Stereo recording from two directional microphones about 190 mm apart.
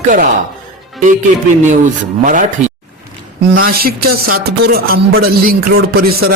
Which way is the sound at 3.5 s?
50° right (ahead or behind).